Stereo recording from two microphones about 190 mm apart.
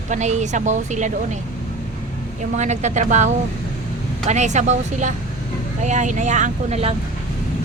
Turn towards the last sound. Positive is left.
turn(degrees=-35)  # may be behind; listen again after turning